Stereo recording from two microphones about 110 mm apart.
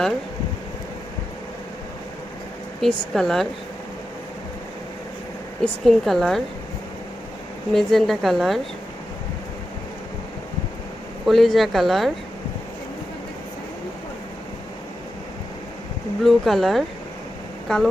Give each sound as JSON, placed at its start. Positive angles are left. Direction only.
{"t": 2.8, "sound": "speech", "side_deg": 5}
{"t": 5.6, "sound": "speech", "side_deg": 0}
{"t": 7.7, "sound": "speech", "side_deg": 5}
{"t": 11.3, "sound": "speech", "side_deg": 0}
{"t": 16.2, "sound": "speech", "side_deg": 0}